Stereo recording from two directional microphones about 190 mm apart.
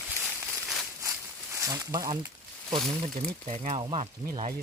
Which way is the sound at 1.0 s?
15° right (ahead or behind).